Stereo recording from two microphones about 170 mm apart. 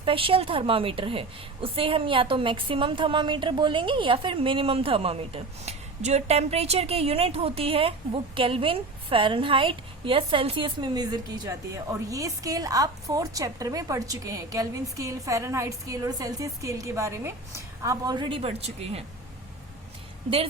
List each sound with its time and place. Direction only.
0.0 s a woman's voice: 30° right (ahead or behind)